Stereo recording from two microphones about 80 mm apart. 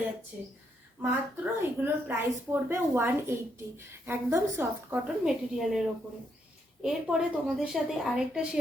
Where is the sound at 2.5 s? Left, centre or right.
Right.